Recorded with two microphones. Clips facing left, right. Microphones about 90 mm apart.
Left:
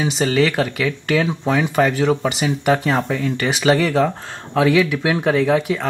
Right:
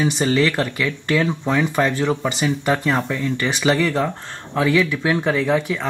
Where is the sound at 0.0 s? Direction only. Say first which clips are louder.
Even; 5° left (ahead or behind).